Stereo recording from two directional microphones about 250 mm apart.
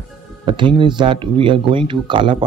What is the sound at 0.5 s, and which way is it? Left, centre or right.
Speech, centre.